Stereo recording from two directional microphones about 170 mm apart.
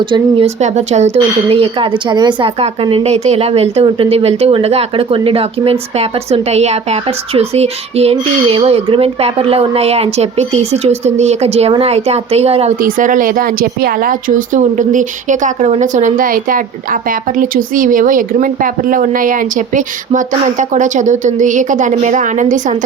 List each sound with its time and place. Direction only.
0.0 s speech: 30° right (ahead or behind)
12.8 s speech: 50° right (ahead or behind)